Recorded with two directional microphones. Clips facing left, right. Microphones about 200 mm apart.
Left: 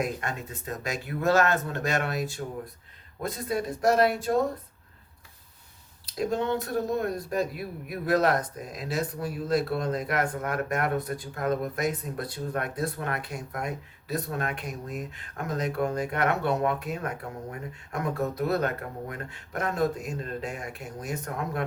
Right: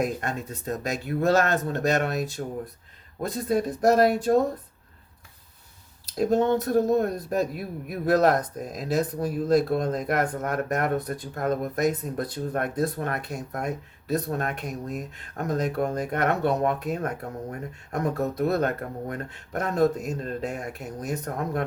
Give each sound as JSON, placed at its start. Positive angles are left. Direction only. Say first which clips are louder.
{"t": 0.0, "sound": "speech", "louder": "right 3 dB", "side_deg": -35}
{"t": 3.5, "sound": "speech", "louder": "right 4 dB", "side_deg": -40}
{"t": 6.1, "sound": "speech", "louder": "right 5 dB", "side_deg": -45}